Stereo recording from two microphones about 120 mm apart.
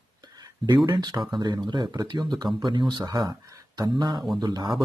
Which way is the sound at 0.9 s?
35° right (ahead or behind).